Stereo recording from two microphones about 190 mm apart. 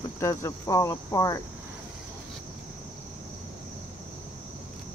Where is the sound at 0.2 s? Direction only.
15° left (ahead or behind).